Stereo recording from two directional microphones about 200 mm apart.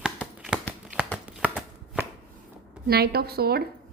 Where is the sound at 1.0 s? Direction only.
5° right (ahead or behind).